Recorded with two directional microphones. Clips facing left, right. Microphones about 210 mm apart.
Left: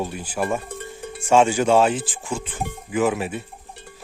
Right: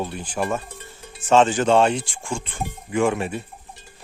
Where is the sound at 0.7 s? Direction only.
55° left (ahead or behind).